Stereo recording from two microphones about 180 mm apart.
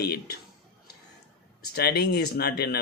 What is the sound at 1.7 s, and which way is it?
Speech, 60° left (ahead or behind).